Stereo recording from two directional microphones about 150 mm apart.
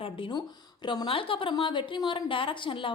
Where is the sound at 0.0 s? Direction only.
35° left (ahead or behind).